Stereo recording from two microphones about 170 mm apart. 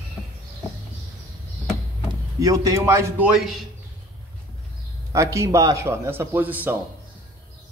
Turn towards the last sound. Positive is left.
turn(degrees=-10)  # may be behind; listen again after turning